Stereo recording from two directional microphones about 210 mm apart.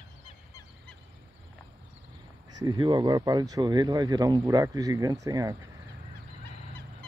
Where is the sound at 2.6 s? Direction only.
20° right (ahead or behind).